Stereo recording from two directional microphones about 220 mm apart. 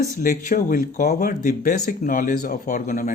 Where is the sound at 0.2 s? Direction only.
35° left (ahead or behind).